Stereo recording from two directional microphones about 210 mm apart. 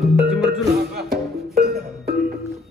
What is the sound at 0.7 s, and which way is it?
Music, 50° right (ahead or behind).